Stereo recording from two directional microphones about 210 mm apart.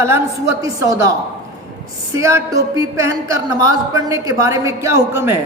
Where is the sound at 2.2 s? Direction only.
15° right (ahead or behind).